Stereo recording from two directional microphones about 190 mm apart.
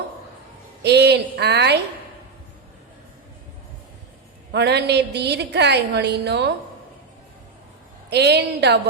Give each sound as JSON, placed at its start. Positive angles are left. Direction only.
{"t": 0.8, "sound": "a woman's voice", "side_deg": -60}
{"t": 4.5, "sound": "a woman's voice", "side_deg": -60}
{"t": 8.1, "sound": "a woman's voice", "side_deg": -60}